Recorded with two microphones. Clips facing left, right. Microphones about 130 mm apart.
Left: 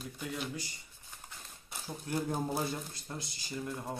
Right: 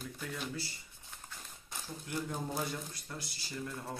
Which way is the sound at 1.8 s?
45° left (ahead or behind).